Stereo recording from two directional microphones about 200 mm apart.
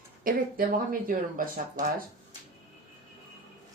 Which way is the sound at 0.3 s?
45° right (ahead or behind).